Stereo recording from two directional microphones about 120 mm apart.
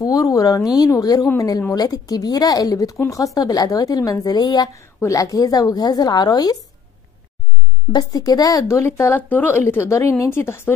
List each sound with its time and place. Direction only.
0.0 s a woman's voice: 30° left (ahead or behind)
7.9 s speech: 30° left (ahead or behind)